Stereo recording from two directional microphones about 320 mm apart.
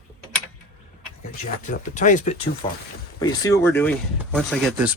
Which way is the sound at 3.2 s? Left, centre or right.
Centre.